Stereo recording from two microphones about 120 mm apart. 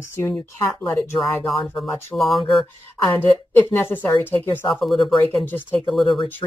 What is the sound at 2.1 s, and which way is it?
Speech, centre (ahead or behind).